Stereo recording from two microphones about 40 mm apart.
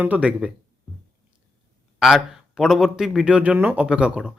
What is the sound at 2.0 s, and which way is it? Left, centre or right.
Speech, centre.